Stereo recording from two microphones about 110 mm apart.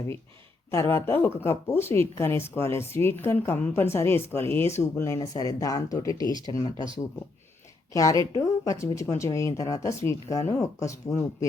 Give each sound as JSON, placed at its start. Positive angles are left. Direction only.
{"t": 0.7, "sound": "a woman's voice", "side_deg": 25}
{"t": 7.9, "sound": "a woman's voice", "side_deg": 30}